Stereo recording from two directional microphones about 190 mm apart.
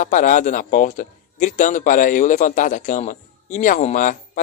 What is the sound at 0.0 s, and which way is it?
A man's voice, 40° left (ahead or behind).